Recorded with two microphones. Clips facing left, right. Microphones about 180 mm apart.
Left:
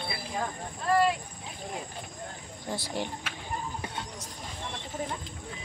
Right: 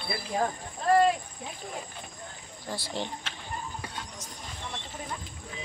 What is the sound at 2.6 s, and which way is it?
Speech, 20° left (ahead or behind).